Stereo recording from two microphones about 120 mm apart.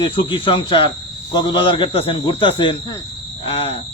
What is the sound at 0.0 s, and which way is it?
Speech, 50° left (ahead or behind).